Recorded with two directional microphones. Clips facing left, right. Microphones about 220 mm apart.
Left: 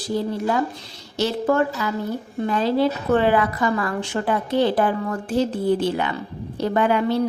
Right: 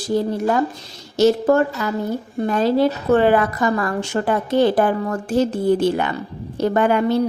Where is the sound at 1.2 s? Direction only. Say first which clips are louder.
Right 5 dB; 45° right (ahead or behind).